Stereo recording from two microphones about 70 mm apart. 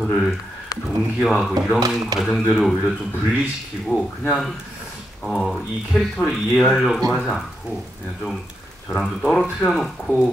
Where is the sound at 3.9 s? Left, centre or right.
Centre.